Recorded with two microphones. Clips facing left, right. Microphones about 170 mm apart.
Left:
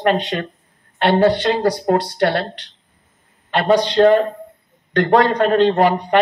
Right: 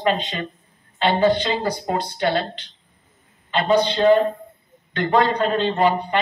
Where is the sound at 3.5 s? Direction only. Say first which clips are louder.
Left 3 dB; 70° left (ahead or behind).